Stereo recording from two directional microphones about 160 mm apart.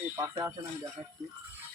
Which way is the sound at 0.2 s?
20° right (ahead or behind).